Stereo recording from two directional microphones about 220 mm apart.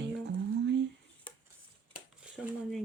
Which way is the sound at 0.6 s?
55° right (ahead or behind).